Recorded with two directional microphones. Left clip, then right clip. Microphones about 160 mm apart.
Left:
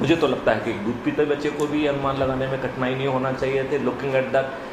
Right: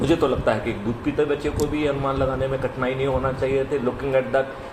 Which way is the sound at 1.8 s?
50° right (ahead or behind).